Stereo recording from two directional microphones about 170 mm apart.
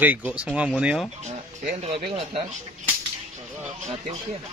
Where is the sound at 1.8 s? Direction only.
35° right (ahead or behind).